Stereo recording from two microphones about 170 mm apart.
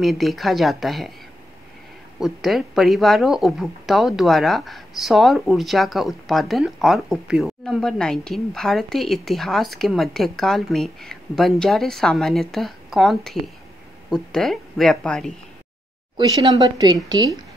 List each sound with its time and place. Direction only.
0.0 s speech: centre (ahead or behind)
2.1 s speech: centre (ahead or behind)
16.2 s speech: 25° right (ahead or behind)